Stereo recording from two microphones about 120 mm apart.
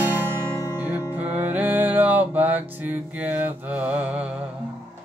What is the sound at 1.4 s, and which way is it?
Music, 15° right (ahead or behind).